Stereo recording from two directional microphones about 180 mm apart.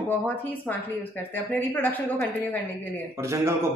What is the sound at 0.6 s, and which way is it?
A woman's voice, 10° left (ahead or behind).